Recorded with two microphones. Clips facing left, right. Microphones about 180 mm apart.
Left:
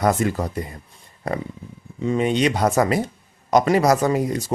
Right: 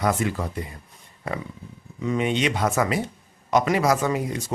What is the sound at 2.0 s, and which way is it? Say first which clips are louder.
Speech: left 4 dB; 35° left (ahead or behind).